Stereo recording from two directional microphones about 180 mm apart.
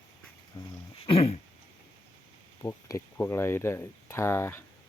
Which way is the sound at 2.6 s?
15° left (ahead or behind).